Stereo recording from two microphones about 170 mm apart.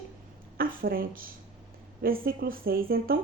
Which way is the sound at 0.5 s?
60° right (ahead or behind).